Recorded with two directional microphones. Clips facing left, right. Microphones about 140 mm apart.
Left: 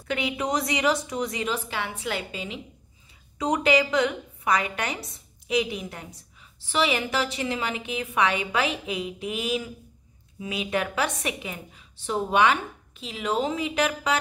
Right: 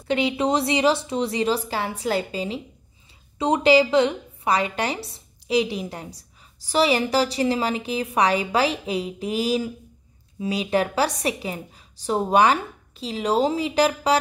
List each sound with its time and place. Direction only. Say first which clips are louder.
0.1 s a woman's voice: right 5 dB; 30° right (ahead or behind)